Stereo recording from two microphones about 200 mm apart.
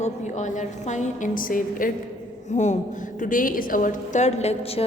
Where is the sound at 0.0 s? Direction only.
35° left (ahead or behind).